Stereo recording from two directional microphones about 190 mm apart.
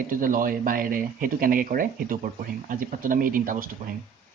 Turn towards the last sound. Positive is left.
turn(degrees=-45)  # may be behind; listen again after turning